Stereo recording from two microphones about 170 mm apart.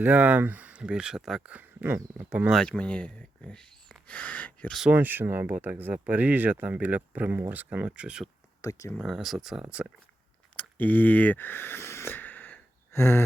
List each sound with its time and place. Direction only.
0.0 s speech: 10° right (ahead or behind)
2.6 s speech: 5° left (ahead or behind)
4.8 s speech: 10° right (ahead or behind)
8.6 s speech: 20° left (ahead or behind)
9.0 s speech: centre (ahead or behind)
10.6 s a sound: 10° left (ahead or behind)